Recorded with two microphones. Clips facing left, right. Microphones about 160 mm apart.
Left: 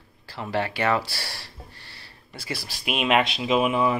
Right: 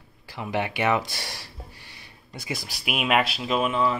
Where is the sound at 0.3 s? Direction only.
15° right (ahead or behind).